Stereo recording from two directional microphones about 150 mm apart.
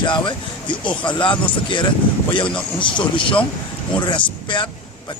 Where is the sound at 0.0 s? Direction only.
30° left (ahead or behind).